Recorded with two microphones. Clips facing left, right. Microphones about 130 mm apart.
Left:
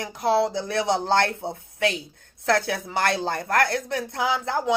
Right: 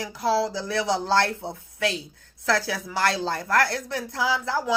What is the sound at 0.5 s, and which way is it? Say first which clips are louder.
Speech: left 1 dB; 55° left (ahead or behind).